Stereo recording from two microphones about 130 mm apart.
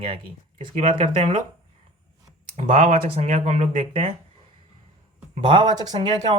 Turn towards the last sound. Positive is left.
turn(degrees=-40)  # may be behind; listen again after turning